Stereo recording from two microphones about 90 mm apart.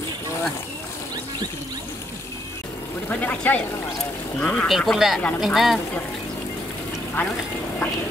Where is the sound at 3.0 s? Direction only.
15° left (ahead or behind).